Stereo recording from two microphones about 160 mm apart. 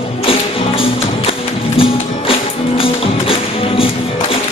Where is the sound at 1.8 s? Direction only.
35° left (ahead or behind).